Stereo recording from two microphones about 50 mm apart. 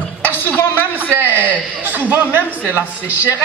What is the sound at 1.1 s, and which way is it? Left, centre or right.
A man's voice, right.